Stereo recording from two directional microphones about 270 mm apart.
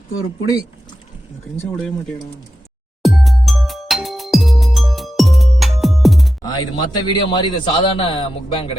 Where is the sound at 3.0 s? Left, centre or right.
Centre.